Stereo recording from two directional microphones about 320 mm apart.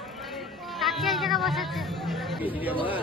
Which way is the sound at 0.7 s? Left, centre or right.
Centre.